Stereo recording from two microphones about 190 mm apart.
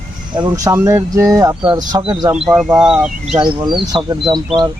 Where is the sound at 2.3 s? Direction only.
5° right (ahead or behind).